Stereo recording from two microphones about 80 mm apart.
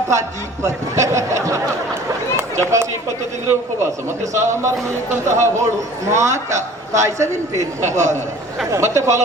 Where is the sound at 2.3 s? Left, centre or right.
Right.